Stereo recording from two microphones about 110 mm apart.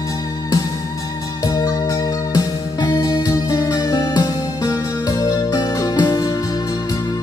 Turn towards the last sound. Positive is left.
turn(degrees=35)  # may be behind; listen again after turning